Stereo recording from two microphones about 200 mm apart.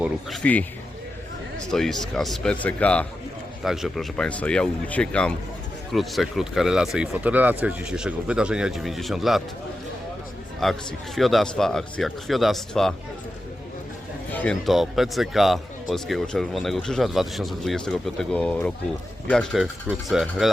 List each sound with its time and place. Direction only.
0.0 s speech: 5° left (ahead or behind)
10.6 s speech: centre (ahead or behind)
14.3 s speech: 5° left (ahead or behind)